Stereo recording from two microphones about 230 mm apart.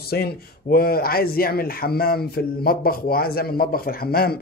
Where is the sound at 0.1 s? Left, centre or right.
Left.